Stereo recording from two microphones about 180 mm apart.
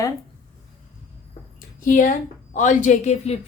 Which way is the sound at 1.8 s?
45° left (ahead or behind).